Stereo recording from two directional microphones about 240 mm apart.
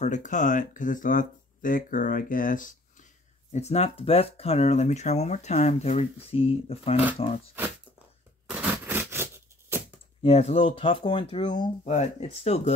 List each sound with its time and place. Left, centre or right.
0.0 s speech: left
8.5 s a sound: centre
10.2 s speech: left
11.8 s speech: left